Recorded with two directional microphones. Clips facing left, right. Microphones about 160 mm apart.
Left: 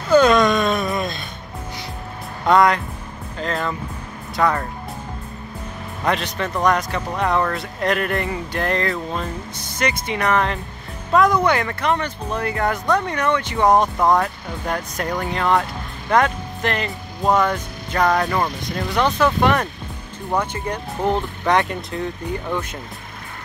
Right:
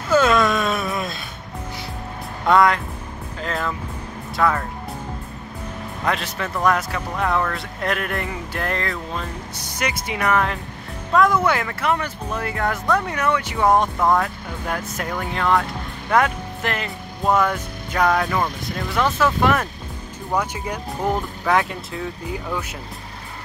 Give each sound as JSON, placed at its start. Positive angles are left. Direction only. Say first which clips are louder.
{"t": 0.1, "sound": "a sound", "louder": "left 3 dB", "side_deg": -5}
{"t": 2.4, "sound": "speech", "louder": "left 1 dB", "side_deg": 0}
{"t": 6.0, "sound": "speech", "louder": "left 3 dB", "side_deg": 0}
{"t": 9.6, "sound": "speech", "louder": "left 3 dB", "side_deg": -10}
{"t": 13.9, "sound": "speech", "louder": "left 2 dB", "side_deg": 20}
{"t": 14.2, "sound": "speech", "louder": "left 2 dB", "side_deg": -5}